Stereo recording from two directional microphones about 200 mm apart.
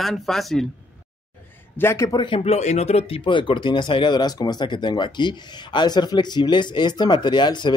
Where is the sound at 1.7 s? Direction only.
15° left (ahead or behind).